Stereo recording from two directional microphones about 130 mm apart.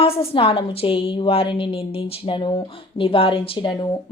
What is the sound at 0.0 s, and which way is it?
A woman's voice, 50° left (ahead or behind).